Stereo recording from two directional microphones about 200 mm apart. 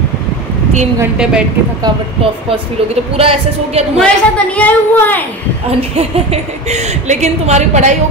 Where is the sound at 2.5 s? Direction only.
25° right (ahead or behind).